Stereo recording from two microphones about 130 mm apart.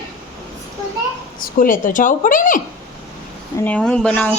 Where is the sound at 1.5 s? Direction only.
90° left.